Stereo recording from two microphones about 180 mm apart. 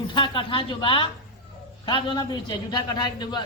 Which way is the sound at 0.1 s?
25° left (ahead or behind).